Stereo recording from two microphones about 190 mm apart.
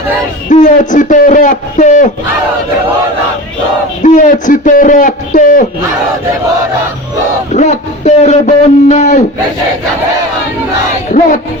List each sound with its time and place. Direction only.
0.5 s a man's voice: 40° left (ahead or behind)
4.0 s a man's voice: 40° left (ahead or behind)
7.5 s a sound: 35° left (ahead or behind)
11.1 s music: 45° left (ahead or behind)